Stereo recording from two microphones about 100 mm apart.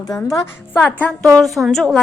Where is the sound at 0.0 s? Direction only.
40° left (ahead or behind).